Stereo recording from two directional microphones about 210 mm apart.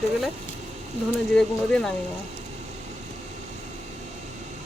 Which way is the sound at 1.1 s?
Centre (ahead or behind).